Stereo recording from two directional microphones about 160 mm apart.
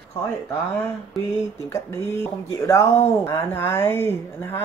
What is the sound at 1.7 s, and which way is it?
Speech, 15° left (ahead or behind).